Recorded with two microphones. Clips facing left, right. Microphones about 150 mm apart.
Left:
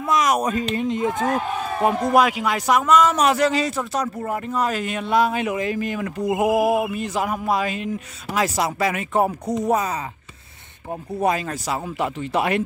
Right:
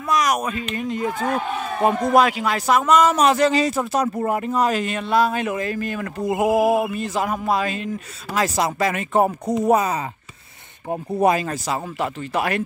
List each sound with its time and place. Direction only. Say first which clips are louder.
0.1 s speech: even; 25° left (ahead or behind)
0.4 s speech: left 4 dB; 35° left (ahead or behind)
0.7 s speech: left 2 dB; 20° left (ahead or behind)
1.8 s a sound: right 1 dB; 10° left (ahead or behind)
2.8 s speech: right 1 dB; centre (ahead or behind)
4.8 s a sound: even; 15° left (ahead or behind)
8.3 s speech: right 1 dB; 5° left (ahead or behind)
11.2 s speech: right 3 dB; 5° right (ahead or behind)
11.7 s speech: left 2 dB; 15° left (ahead or behind)